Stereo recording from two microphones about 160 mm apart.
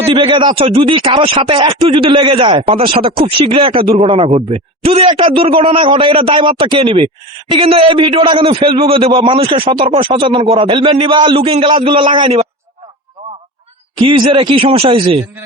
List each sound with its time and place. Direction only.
0.1 s speech: 35° right (ahead or behind)
14.0 s speech: 30° right (ahead or behind)